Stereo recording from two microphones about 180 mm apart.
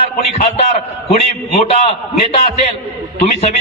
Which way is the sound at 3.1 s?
35° left (ahead or behind).